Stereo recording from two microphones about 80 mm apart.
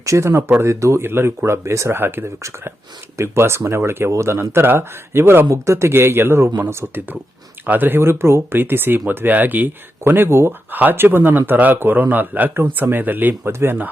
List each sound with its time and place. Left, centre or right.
0.0 s speech: right